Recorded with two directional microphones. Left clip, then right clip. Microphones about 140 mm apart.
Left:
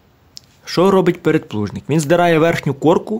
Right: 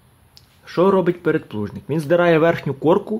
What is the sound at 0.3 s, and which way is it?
Speech, 25° left (ahead or behind).